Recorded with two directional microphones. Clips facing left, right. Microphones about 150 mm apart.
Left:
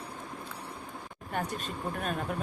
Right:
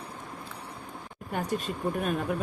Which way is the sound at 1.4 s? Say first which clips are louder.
Right 5 dB; 10° right (ahead or behind).